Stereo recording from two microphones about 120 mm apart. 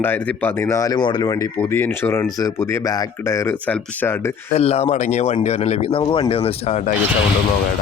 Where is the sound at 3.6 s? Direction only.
15° left (ahead or behind).